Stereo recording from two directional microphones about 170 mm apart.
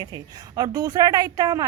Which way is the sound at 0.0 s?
20° right (ahead or behind).